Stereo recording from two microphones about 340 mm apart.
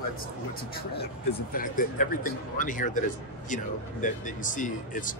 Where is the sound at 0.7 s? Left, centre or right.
Left.